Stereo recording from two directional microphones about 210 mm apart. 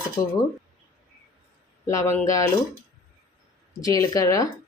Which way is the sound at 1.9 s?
15° left (ahead or behind).